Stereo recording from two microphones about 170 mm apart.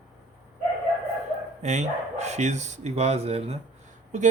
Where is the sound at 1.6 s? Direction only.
45° right (ahead or behind).